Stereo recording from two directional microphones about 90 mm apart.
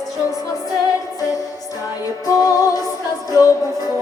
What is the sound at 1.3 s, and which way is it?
Music, 40° left (ahead or behind).